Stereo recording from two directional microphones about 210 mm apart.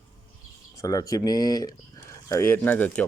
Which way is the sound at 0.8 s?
15° left (ahead or behind).